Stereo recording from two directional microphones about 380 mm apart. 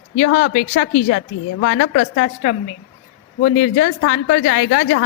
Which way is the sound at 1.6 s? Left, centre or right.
Left.